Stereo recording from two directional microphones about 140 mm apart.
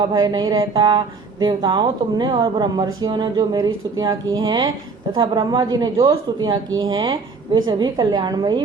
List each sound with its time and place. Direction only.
0.0 s a woman's voice: 30° right (ahead or behind)